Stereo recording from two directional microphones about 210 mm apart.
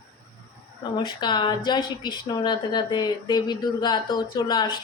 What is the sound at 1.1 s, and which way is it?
Speech, 20° left (ahead or behind).